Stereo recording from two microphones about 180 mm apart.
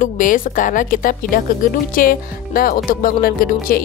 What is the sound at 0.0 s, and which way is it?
Speech, 45° left (ahead or behind).